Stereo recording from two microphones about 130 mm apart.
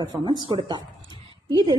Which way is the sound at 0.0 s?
30° right (ahead or behind).